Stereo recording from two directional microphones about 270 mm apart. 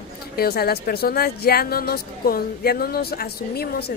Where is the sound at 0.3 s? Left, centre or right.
Left.